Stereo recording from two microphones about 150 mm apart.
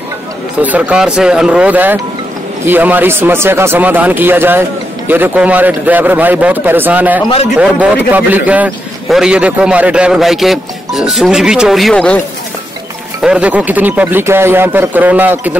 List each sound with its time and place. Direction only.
0.6 s a man's voice: 10° right (ahead or behind); by 12.2 s 5° left (ahead or behind)
13.2 s speech: 5° right (ahead or behind)